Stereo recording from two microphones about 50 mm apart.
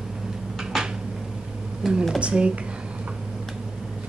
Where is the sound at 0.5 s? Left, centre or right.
Centre.